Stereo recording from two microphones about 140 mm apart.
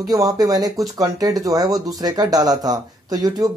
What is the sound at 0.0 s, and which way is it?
Speech, 25° right (ahead or behind).